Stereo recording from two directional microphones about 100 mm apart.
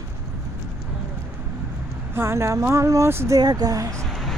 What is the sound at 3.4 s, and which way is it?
Speech, 40° right (ahead or behind).